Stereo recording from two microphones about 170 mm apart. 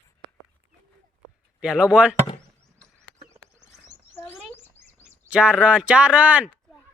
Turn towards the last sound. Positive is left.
turn(degrees=-10)  # may be behind; listen again after turning